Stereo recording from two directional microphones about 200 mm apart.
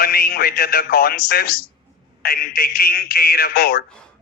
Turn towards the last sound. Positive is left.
turn(degrees=50)  # may be behind; listen again after turning